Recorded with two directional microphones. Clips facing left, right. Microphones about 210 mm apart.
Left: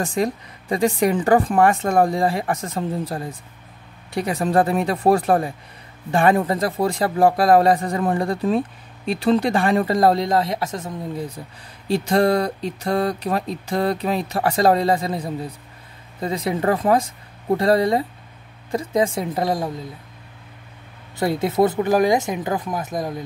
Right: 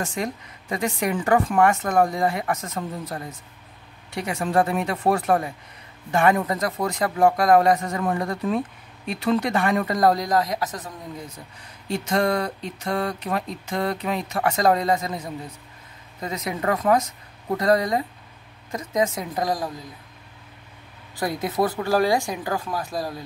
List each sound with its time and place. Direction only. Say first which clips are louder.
0.0 s speech: left 6 dB; 35° left (ahead or behind)
21.2 s speech: left 5 dB; 30° left (ahead or behind)